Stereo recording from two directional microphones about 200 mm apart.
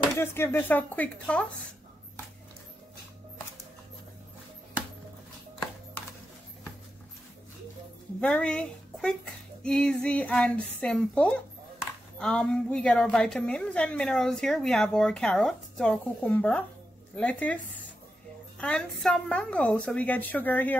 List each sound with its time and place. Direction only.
0.1 s a woman's voice: 10° left (ahead or behind)
8.2 s a woman's voice: 5° left (ahead or behind)
18.6 s a woman's voice: 5° left (ahead or behind)